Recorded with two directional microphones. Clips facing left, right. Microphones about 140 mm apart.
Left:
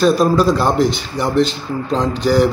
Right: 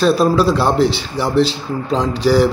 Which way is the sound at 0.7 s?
30° right (ahead or behind).